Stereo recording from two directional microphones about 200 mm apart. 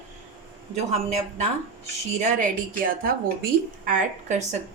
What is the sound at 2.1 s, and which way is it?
A woman's voice, 45° right (ahead or behind).